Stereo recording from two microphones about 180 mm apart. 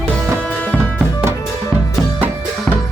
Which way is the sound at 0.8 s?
15° right (ahead or behind).